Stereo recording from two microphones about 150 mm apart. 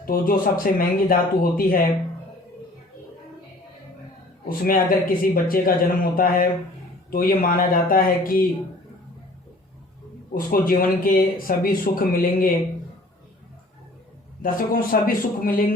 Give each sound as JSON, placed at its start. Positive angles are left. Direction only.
{"t": 0.0, "sound": "speech", "side_deg": 70}
{"t": 4.4, "sound": "speech", "side_deg": 75}
{"t": 10.3, "sound": "speech", "side_deg": 70}
{"t": 14.4, "sound": "speech", "side_deg": 70}